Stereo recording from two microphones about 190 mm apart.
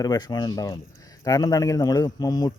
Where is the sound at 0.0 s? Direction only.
20° left (ahead or behind).